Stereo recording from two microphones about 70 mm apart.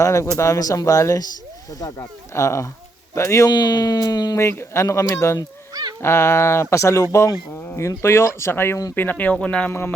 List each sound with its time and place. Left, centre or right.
0.0 s speech: left
3.5 s speech: left
4.4 s speech: left; by 9.7 s centre